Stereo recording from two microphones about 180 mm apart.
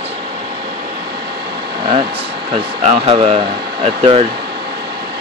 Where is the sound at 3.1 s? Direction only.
30° right (ahead or behind).